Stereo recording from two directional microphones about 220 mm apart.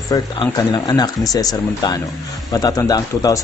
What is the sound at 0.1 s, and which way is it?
Speech, 15° left (ahead or behind).